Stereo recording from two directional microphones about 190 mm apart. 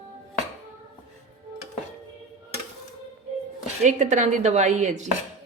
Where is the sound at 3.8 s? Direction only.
40° right (ahead or behind).